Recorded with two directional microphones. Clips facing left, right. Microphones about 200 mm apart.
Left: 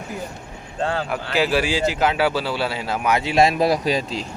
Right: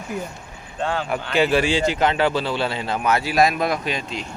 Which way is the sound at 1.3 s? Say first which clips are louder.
Right 2 dB; 5° left (ahead or behind).